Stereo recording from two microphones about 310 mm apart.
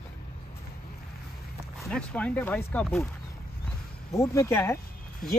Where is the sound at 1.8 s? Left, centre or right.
Centre.